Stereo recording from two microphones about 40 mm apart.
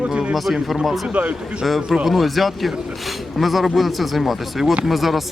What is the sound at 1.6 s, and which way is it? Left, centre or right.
Speech, centre.